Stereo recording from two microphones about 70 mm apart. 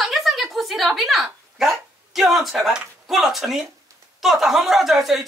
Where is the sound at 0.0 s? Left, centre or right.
Centre.